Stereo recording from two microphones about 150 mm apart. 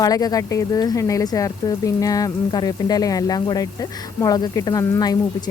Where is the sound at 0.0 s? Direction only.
25° left (ahead or behind).